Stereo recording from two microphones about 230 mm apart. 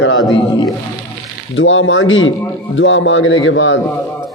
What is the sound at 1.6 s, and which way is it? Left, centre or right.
A man's voice, left.